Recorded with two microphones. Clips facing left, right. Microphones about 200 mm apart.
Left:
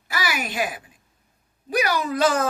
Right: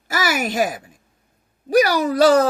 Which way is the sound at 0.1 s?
45° right (ahead or behind).